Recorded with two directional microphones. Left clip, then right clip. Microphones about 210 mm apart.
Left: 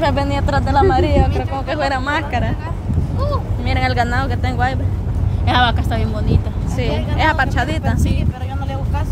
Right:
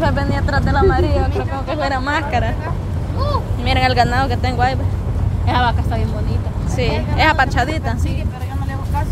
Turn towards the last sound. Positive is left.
turn(degrees=0)  # may be behind; listen again after turning